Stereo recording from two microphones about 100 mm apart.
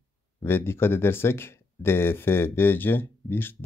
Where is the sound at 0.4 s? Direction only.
25° left (ahead or behind).